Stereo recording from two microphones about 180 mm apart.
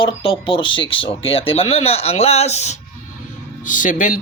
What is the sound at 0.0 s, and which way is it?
Speech, 30° left (ahead or behind).